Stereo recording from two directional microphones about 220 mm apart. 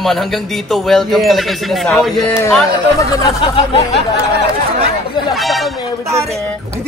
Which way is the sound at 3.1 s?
15° left (ahead or behind).